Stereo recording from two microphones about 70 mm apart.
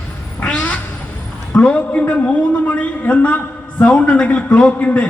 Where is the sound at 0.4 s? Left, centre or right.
Centre.